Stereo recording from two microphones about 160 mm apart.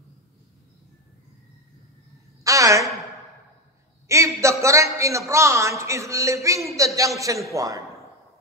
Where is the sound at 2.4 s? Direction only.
20° right (ahead or behind).